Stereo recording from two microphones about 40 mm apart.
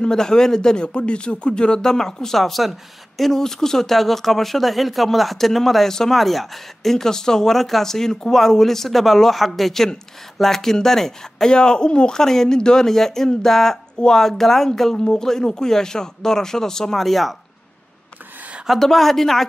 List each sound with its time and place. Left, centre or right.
0.0 s speech: centre
11.5 s speech: left; by 17.4 s centre
18.8 s speech: centre